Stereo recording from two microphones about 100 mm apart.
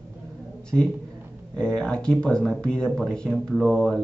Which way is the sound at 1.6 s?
10° left (ahead or behind).